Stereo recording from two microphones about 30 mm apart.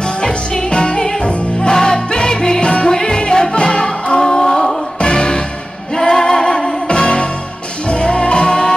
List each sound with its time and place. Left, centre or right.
0.2 s music: left
1.7 s music: left